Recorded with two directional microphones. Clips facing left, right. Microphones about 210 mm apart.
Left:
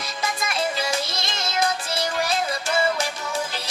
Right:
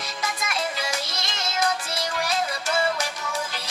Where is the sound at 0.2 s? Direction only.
30° left (ahead or behind).